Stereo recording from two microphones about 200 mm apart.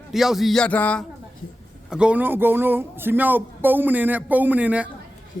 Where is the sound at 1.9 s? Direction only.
5° right (ahead or behind).